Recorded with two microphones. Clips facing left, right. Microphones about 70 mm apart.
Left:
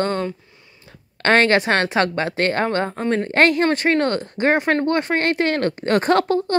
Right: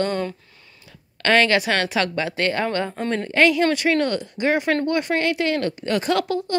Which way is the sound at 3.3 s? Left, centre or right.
Left.